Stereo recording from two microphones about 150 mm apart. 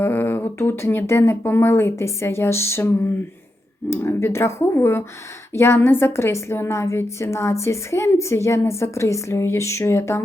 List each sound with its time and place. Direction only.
0.0 s a woman's voice: 15° left (ahead or behind)